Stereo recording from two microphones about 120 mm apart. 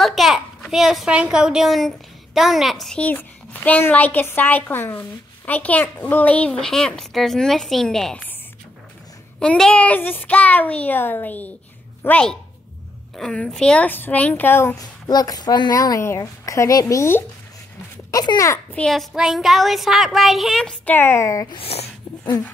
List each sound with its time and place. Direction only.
0.0 s a child's voice: centre (ahead or behind)
3.0 s a child's voice: 15° left (ahead or behind)
9.4 s a child's voice: 10° left (ahead or behind)
14.8 s a woman's voice: 30° left (ahead or behind)
18.1 s a child's voice: 35° left (ahead or behind)
18.5 s a child's voice: 15° left (ahead or behind)
18.9 s a woman's voice: centre (ahead or behind); by 21.5 s 30° left (ahead or behind)
21.5 s speech: 55° left (ahead or behind)